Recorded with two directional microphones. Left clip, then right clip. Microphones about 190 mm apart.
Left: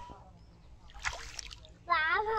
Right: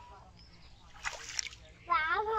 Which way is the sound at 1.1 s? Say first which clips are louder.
Right 1 dB; 15° left (ahead or behind).